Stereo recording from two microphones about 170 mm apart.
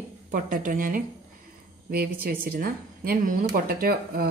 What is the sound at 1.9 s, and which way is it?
Speech, 65° right (ahead or behind).